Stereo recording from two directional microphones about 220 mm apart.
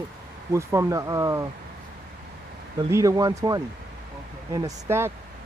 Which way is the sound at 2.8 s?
15° right (ahead or behind).